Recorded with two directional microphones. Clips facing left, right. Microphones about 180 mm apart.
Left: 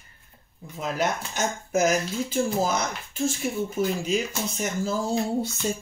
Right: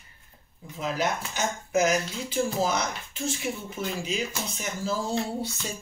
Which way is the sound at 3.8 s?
45° left (ahead or behind).